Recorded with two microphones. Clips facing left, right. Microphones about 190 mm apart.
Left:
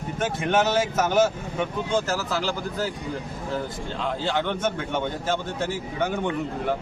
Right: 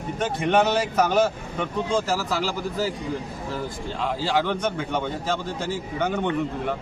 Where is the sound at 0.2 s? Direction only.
Centre (ahead or behind).